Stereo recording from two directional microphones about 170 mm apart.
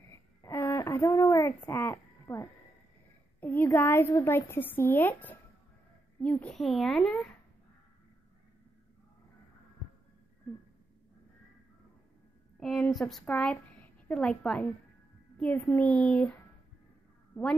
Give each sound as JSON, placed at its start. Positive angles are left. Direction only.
{"t": 0.1, "sound": "a sound", "side_deg": 15}
{"t": 3.3, "sound": "a woman's voice", "side_deg": 10}
{"t": 12.5, "sound": "a child's voice", "side_deg": 5}